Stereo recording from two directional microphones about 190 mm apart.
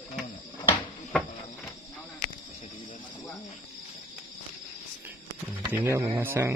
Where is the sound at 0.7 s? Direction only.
5° left (ahead or behind).